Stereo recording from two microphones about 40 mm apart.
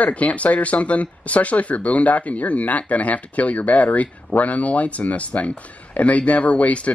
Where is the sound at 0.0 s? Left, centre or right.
Left.